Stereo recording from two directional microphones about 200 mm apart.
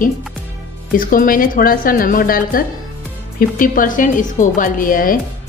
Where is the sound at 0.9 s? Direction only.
45° left (ahead or behind).